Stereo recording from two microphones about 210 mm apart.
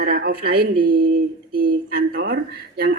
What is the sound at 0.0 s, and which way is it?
A woman's voice, 50° right (ahead or behind).